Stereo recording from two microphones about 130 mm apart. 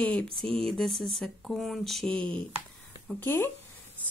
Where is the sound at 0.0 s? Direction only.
5° left (ahead or behind).